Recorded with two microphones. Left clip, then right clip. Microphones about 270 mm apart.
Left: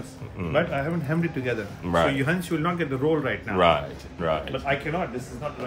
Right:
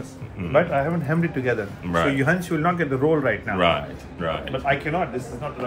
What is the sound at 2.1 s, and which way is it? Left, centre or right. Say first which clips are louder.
Speech: right 4 dB; centre.